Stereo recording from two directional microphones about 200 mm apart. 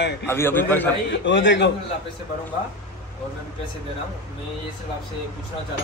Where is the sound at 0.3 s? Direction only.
10° left (ahead or behind).